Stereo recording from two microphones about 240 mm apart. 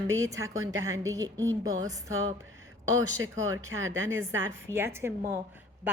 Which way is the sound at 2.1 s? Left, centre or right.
Right.